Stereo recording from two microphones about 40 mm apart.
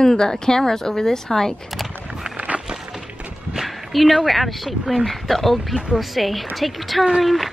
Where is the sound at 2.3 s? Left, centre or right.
Right.